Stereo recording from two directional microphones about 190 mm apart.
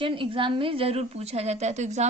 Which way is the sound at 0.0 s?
25° right (ahead or behind).